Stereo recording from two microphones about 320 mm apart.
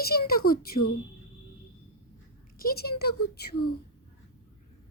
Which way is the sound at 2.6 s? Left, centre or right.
Left.